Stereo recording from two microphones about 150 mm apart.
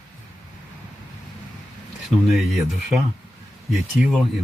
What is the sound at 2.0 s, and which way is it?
Speech, centre (ahead or behind).